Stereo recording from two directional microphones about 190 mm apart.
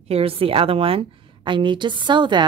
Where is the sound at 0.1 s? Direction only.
30° right (ahead or behind).